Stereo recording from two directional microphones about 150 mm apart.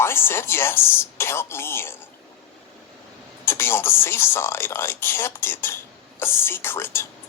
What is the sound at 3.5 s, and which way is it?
Speech, 15° left (ahead or behind).